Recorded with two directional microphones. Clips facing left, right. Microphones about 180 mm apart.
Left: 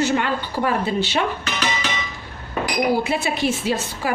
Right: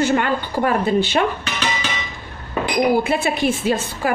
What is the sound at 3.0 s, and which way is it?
A woman's voice, 55° right (ahead or behind).